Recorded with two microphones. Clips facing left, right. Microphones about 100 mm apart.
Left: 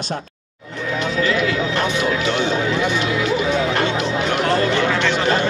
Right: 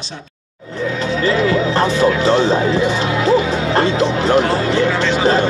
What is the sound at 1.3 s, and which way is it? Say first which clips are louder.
Music: right 8 dB; 35° right (ahead or behind).